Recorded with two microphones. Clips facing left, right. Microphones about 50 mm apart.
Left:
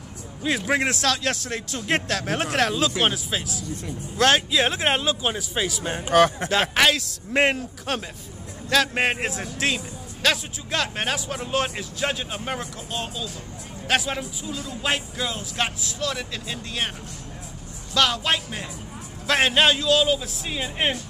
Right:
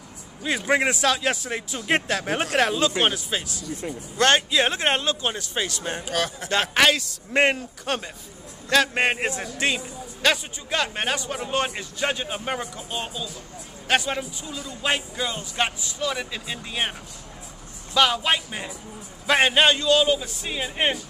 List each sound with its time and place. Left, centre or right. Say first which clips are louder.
0.4 s a man's voice: right 1 dB; centre
6.0 s speech: left 12 dB; left
6.7 s a man's voice: right 1 dB; centre
17.9 s a man's voice: right 1 dB; centre